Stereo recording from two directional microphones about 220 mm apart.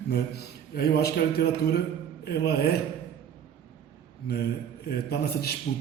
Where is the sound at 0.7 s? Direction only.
45° left (ahead or behind).